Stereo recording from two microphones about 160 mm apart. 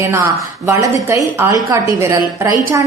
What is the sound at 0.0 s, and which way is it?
A woman's voice, 15° right (ahead or behind).